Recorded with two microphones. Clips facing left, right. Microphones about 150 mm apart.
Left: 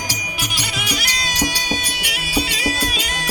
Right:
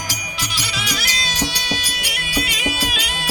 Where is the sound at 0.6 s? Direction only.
50° left (ahead or behind).